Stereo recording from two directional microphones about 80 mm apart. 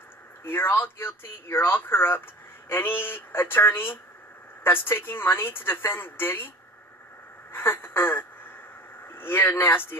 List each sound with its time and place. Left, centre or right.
0.4 s a woman's voice: left
7.5 s a woman's voice: left